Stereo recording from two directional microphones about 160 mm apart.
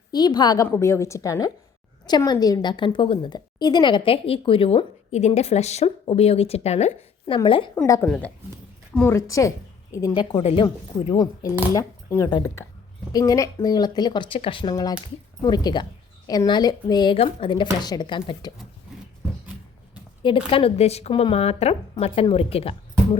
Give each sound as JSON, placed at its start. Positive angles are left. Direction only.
{"t": 0.1, "sound": "a woman's voice", "side_deg": 25}
{"t": 7.3, "sound": "a woman's voice", "side_deg": 30}
{"t": 8.0, "sound": "a woman's voice", "side_deg": 5}
{"t": 10.3, "sound": "a woman's voice", "side_deg": 35}
{"t": 11.7, "sound": "a woman's voice", "side_deg": 20}
{"t": 20.2, "sound": "a woman's voice", "side_deg": 35}